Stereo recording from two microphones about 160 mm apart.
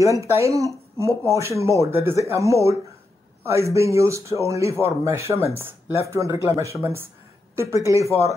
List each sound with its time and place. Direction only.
0.0 s speech: 20° right (ahead or behind)